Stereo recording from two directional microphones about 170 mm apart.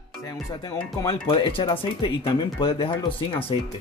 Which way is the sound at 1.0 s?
30° left (ahead or behind).